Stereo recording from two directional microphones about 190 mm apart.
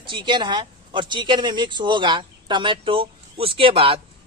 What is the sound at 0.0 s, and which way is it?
Speech, 25° right (ahead or behind).